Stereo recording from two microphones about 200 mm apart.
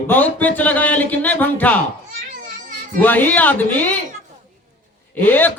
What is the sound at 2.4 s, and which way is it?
Children playing, 45° right (ahead or behind).